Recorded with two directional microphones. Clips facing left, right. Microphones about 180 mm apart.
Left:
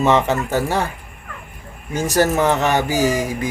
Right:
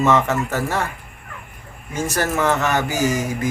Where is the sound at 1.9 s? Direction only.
35° left (ahead or behind).